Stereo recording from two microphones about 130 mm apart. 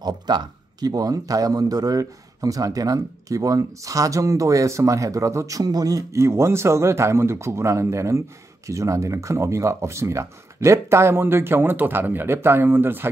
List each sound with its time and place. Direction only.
0.0 s speech: 30° right (ahead or behind); by 13.1 s 15° right (ahead or behind)